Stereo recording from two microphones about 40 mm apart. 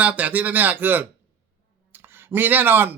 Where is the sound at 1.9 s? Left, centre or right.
Right.